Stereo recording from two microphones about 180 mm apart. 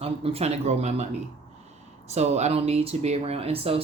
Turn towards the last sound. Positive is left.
turn(degrees=-35)  # may be behind; listen again after turning